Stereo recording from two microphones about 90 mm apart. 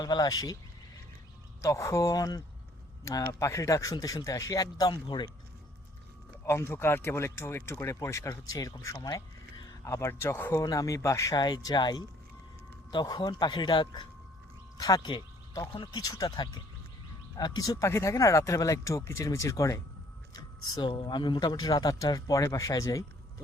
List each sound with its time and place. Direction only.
0.0 s speech: 45° left (ahead or behind)
1.6 s a man's voice: 35° left (ahead or behind); by 5.3 s 55° left (ahead or behind)
6.4 s speech: 30° left (ahead or behind)
10.6 s speech: 40° left (ahead or behind)
11.4 s a man's voice: 50° left (ahead or behind)
14.8 s speech: 40° left (ahead or behind)
15.0 s a sound: 60° left (ahead or behind)
15.8 s speech: 45° left (ahead or behind)
17.6 s speech: 40° left (ahead or behind)
20.7 s a man's voice: 60° left (ahead or behind)
21.5 s speech: 45° left (ahead or behind)